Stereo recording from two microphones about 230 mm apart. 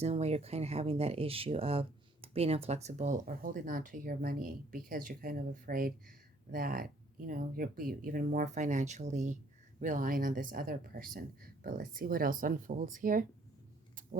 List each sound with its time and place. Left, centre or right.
0.0 s speech: right